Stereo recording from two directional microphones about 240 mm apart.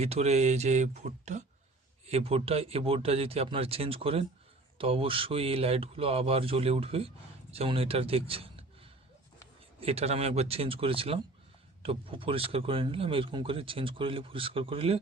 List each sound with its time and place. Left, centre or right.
0.0 s speech: right
9.8 s speech: right